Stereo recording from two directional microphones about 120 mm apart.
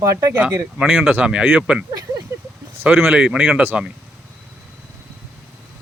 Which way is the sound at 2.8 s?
15° right (ahead or behind).